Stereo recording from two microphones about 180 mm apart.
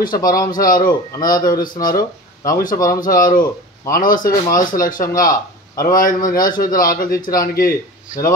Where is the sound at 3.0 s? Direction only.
50° left (ahead or behind).